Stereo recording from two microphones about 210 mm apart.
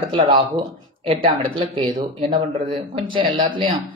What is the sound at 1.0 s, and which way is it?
Speech, 25° right (ahead or behind).